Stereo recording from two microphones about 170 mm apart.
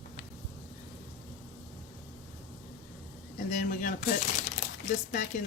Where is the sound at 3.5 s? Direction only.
50° left (ahead or behind).